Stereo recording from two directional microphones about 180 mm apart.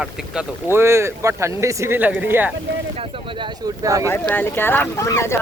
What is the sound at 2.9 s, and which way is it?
Speech, 30° right (ahead or behind).